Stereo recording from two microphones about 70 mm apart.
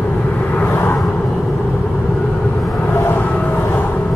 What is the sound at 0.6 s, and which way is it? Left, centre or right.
Vehicle, left.